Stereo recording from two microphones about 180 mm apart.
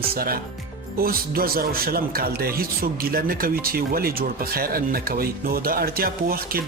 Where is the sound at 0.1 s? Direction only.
55° right (ahead or behind).